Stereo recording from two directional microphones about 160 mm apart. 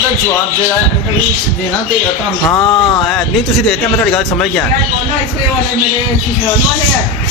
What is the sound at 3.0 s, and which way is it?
Speech, centre (ahead or behind).